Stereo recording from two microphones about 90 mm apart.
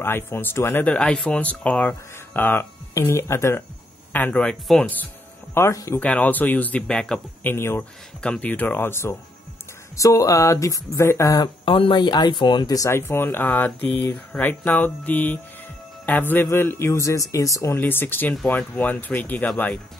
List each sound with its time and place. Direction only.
0.0 s speech: 25° left (ahead or behind)
0.8 s speech: 10° left (ahead or behind); by 3.6 s 30° left (ahead or behind)
4.1 s speech: 15° left (ahead or behind)
5.5 s speech: 35° left (ahead or behind)
5.9 s speech: 15° left (ahead or behind)
7.4 s speech: 25° left (ahead or behind)
8.2 s speech: 10° left (ahead or behind)
9.9 s a sound: 35° left (ahead or behind)
11.3 s speech: 50° left (ahead or behind)
11.7 s speech: 65° left (ahead or behind)
12.9 s speech: 25° left (ahead or behind)
16.4 s a sound: 25° left (ahead or behind)
17.7 s speech: 25° left (ahead or behind)